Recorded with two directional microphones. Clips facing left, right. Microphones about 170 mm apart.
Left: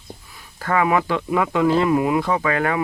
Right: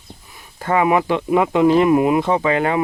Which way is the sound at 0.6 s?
20° right (ahead or behind).